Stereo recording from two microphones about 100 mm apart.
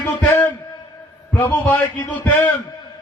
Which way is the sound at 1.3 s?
20° left (ahead or behind).